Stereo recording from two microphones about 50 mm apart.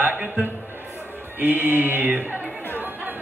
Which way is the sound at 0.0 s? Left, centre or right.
Right.